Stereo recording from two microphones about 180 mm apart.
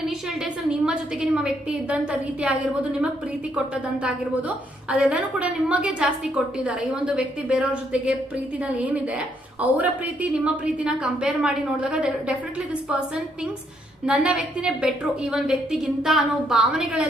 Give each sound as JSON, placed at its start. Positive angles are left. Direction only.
{"t": 0.7, "sound": "a woman's voice", "side_deg": -5}
{"t": 14.0, "sound": "a woman's voice", "side_deg": -5}